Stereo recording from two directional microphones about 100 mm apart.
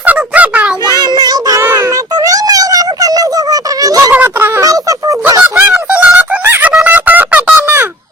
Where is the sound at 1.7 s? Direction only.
35° right (ahead or behind).